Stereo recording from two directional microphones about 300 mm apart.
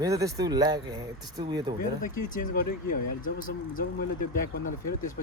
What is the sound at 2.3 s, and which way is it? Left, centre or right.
Speech, left.